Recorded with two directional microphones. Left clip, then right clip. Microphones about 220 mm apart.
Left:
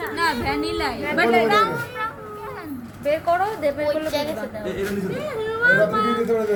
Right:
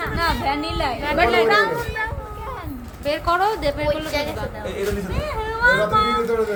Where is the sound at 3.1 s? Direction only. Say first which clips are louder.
Right 1 dB; 20° right (ahead or behind).